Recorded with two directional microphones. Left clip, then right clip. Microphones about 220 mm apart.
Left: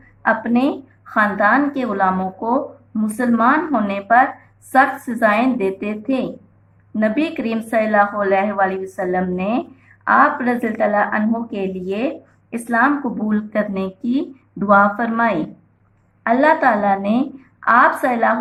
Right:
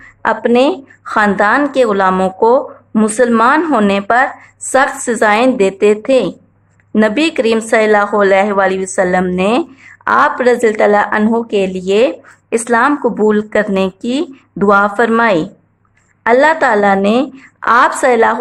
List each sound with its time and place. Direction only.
0.2 s a woman's voice: 55° right (ahead or behind)